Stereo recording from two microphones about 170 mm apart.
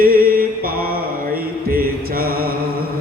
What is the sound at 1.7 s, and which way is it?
Mantra, 60° right (ahead or behind).